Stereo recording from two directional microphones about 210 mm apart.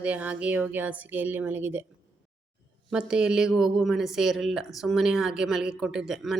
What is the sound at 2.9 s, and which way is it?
Speech, 5° right (ahead or behind).